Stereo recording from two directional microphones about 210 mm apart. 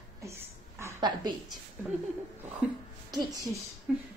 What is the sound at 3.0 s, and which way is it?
Speech, 20° right (ahead or behind).